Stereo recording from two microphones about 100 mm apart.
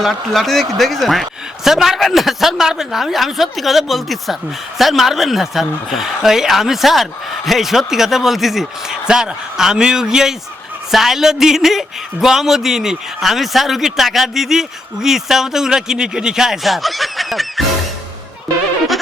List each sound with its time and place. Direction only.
0.0 s a man's voice: centre (ahead or behind)